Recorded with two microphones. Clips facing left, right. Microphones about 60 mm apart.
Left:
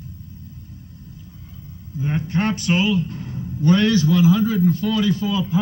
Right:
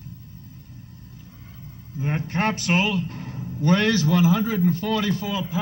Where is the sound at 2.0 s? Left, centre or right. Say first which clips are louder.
Left 2 dB; right.